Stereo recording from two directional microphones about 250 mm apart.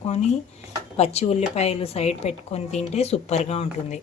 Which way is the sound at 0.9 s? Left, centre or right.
Left.